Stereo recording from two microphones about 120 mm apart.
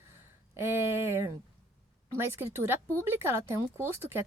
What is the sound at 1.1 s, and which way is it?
Speech, 20° right (ahead or behind).